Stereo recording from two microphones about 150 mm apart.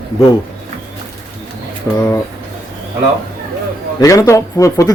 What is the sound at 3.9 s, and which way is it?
Speech, 20° left (ahead or behind).